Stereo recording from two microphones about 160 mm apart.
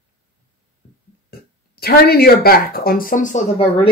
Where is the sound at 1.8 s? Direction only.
75° left (ahead or behind); by 3.4 s 55° left (ahead or behind).